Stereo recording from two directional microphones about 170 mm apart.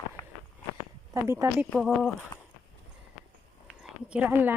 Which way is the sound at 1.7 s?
Centre (ahead or behind).